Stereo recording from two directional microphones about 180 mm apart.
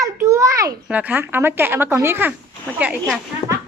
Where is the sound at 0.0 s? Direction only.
15° right (ahead or behind).